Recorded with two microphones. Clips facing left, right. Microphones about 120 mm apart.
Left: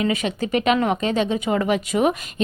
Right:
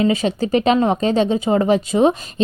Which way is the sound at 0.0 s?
30° right (ahead or behind).